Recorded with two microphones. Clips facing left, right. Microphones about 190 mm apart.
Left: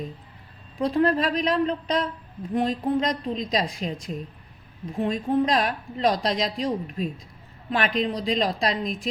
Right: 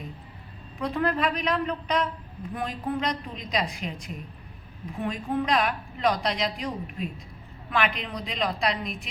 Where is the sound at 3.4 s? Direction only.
35° left (ahead or behind).